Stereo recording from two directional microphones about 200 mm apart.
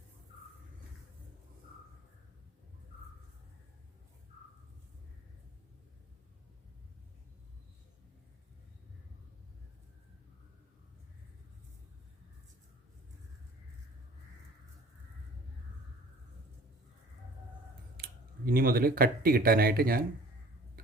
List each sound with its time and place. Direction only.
17.9 s speech: 50° right (ahead or behind)